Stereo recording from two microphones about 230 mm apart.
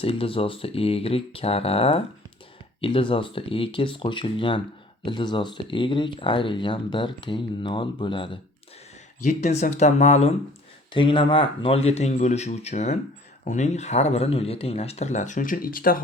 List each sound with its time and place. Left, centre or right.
0.0 s speech: left
9.2 s speech: left